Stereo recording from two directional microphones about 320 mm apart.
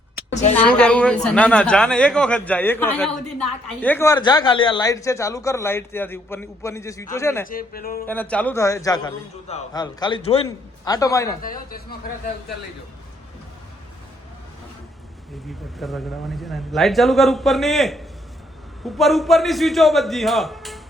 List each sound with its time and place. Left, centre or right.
0.5 s a man's voice: centre
7.4 s speech: left
8.0 s a man's voice: centre
11.4 s speech: left
15.8 s speech: centre